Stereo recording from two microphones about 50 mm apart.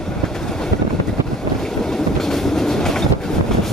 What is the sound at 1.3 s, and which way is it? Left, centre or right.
Train, centre.